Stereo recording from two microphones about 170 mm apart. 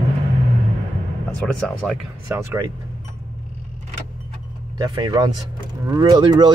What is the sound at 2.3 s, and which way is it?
Speech, 10° right (ahead or behind).